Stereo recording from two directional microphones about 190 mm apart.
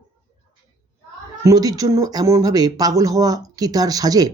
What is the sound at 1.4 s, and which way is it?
Speech, 20° right (ahead or behind).